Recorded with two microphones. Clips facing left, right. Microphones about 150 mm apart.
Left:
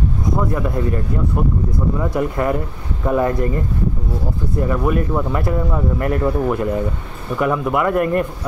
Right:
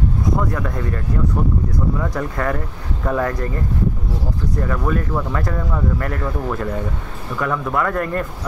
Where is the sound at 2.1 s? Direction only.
15° left (ahead or behind).